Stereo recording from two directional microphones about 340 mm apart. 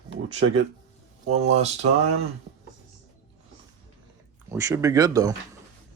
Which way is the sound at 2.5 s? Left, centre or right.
Right.